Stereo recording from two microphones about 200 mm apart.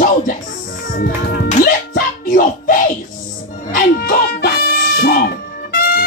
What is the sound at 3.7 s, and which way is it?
Music, 45° left (ahead or behind).